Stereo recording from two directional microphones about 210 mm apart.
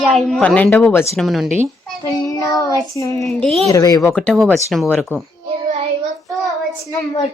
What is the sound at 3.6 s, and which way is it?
A woman's voice, 15° left (ahead or behind).